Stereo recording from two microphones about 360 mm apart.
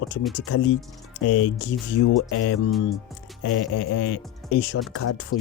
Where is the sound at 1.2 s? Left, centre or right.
Left.